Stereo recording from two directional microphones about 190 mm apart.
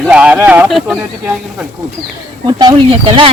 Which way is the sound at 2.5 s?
20° right (ahead or behind).